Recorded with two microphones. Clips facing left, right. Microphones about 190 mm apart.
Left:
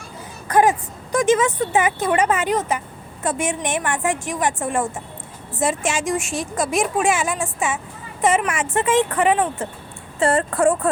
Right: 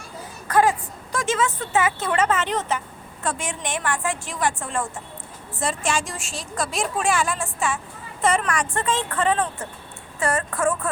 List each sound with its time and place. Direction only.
0.4 s a woman's voice: 20° left (ahead or behind)
10.2 s a woman's voice: 30° left (ahead or behind)